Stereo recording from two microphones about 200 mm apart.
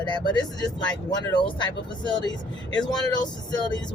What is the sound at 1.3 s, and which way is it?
Speech, 25° left (ahead or behind).